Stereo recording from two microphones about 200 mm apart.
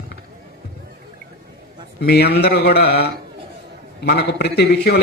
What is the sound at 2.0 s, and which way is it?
Speech, 55° left (ahead or behind).